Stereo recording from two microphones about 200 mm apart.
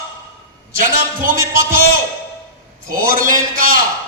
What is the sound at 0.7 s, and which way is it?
A man's voice, 45° right (ahead or behind).